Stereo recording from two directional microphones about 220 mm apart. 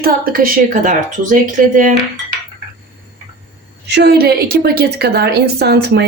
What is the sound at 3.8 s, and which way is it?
A woman's voice, 50° right (ahead or behind).